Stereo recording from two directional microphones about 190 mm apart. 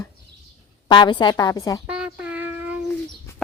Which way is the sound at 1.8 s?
5° right (ahead or behind).